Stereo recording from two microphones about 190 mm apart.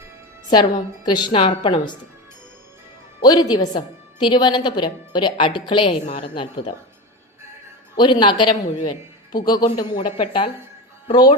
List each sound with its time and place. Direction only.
0.5 s a woman's voice: 20° left (ahead or behind)
3.2 s a woman's voice: 20° left (ahead or behind)
7.9 s a woman's voice: 25° left (ahead or behind)